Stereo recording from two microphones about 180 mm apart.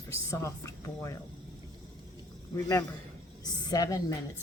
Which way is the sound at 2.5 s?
15° left (ahead or behind).